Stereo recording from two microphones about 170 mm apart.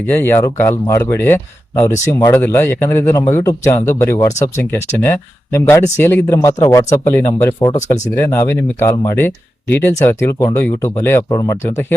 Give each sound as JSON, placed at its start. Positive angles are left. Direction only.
{"t": 0.1, "sound": "a man's voice", "side_deg": 10}
{"t": 7.6, "sound": "speech", "side_deg": 25}
{"t": 8.1, "sound": "a man's voice", "side_deg": 15}